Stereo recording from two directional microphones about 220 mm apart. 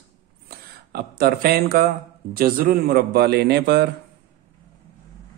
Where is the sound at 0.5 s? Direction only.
45° right (ahead or behind).